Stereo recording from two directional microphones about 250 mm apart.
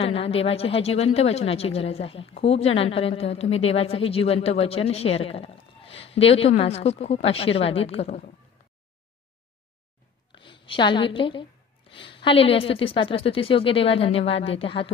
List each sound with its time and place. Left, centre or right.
0.0 s a woman's voice: left
10.3 s a woman's voice: centre